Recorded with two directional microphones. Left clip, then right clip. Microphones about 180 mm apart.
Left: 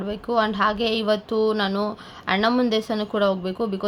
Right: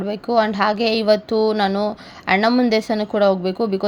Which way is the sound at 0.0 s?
20° right (ahead or behind).